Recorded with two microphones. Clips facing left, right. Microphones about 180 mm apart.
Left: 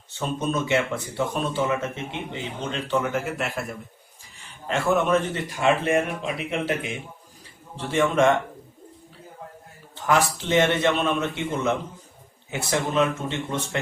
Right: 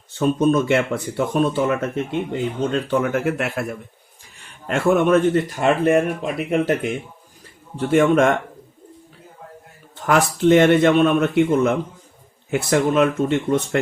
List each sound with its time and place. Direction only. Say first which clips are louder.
0.1 s speech: right 9 dB; 55° right (ahead or behind)
4.6 s speech: right 5 dB; 50° right (ahead or behind)
9.9 s speech: right 3 dB; 55° right (ahead or behind)